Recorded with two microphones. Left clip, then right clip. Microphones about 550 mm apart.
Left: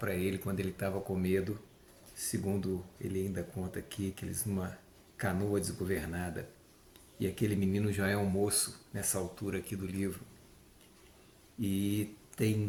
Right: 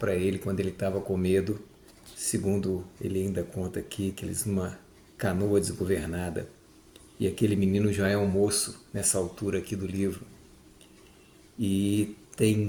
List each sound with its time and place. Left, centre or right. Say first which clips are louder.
0.0 s speech: right 8 dB; left
11.6 s speech: right 7 dB; left